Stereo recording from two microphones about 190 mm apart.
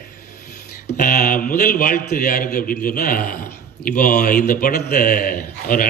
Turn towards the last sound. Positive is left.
turn(degrees=45)  # may be behind; listen again after turning